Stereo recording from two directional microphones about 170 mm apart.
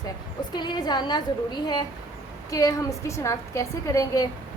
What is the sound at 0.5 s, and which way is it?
A woman's voice, 25° left (ahead or behind).